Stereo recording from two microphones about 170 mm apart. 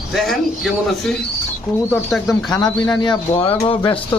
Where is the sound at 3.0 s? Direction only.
30° left (ahead or behind).